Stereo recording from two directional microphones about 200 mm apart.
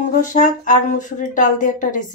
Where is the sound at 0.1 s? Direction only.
40° left (ahead or behind).